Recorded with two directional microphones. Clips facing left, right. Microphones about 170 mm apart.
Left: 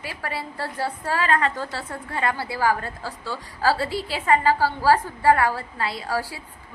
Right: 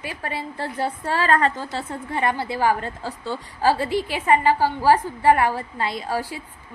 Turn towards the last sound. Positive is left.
turn(degrees=-20)  # may be behind; listen again after turning